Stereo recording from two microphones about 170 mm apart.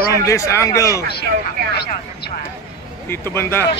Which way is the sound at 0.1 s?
20° left (ahead or behind).